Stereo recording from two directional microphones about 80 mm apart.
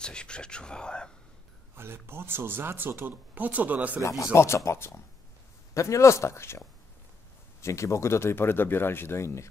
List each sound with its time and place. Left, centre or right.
0.0 s speech: centre
1.8 s speech: right
4.3 s speech: left
7.6 s speech: left